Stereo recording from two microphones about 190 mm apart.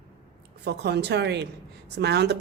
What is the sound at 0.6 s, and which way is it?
A woman's voice, 60° right (ahead or behind).